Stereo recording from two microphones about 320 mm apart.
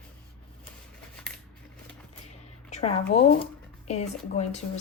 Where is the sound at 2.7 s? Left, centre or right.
Left.